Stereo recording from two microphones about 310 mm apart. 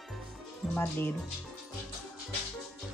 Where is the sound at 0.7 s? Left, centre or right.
Centre.